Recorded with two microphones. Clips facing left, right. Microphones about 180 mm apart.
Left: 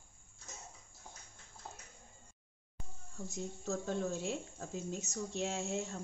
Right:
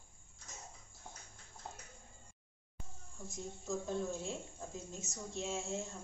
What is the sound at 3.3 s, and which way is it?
A woman's voice, 75° left (ahead or behind).